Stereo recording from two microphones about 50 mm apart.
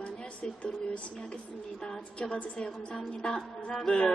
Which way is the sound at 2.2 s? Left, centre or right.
Centre.